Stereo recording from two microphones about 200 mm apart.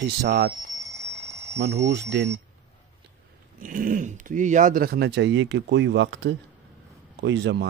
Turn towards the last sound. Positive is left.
turn(degrees=-60)  # may be behind; listen again after turning